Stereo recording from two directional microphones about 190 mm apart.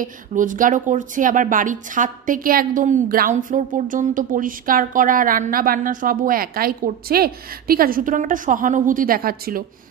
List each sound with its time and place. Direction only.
0.0 s a woman's voice: 45° right (ahead or behind)